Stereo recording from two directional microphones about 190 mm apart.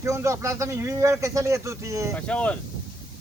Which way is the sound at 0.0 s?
15° right (ahead or behind).